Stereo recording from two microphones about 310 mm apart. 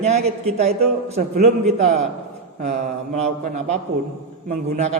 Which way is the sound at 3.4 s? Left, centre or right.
Right.